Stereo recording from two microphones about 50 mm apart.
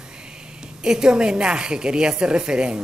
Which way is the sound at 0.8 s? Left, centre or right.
Centre.